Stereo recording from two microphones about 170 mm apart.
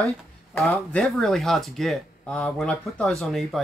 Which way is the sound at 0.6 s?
5° left (ahead or behind).